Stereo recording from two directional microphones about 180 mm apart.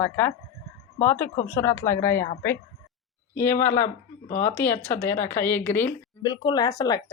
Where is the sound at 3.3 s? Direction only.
15° left (ahead or behind).